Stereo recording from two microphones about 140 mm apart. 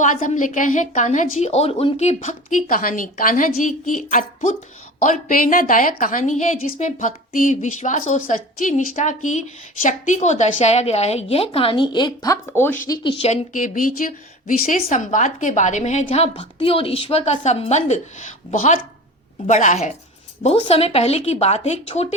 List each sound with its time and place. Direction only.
0.0 s a woman's voice: 65° left (ahead or behind); by 12.8 s 15° left (ahead or behind)
12.9 s speech: 35° left (ahead or behind)
13.2 s a woman's voice: 60° left (ahead or behind)
14.8 s a woman's voice: 55° left (ahead or behind)
20.4 s a woman's voice: 50° left (ahead or behind)